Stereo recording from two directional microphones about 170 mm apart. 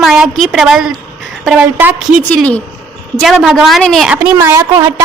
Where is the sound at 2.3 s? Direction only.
5° left (ahead or behind).